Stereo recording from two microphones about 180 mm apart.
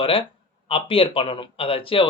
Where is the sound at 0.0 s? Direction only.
30° left (ahead or behind).